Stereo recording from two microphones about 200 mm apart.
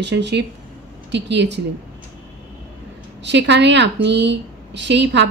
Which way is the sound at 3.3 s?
60° right (ahead or behind).